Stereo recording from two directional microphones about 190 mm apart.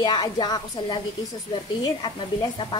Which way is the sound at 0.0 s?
20° left (ahead or behind).